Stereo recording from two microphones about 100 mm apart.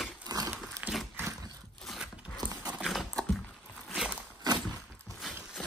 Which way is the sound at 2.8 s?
5° right (ahead or behind).